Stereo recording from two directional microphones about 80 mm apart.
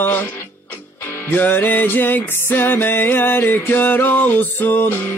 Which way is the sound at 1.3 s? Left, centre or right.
Left.